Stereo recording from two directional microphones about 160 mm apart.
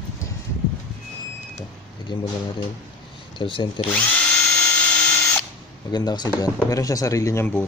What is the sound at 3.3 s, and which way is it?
Speech, 30° left (ahead or behind).